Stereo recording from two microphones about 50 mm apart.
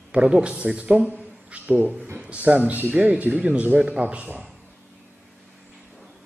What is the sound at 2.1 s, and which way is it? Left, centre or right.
Speech, right.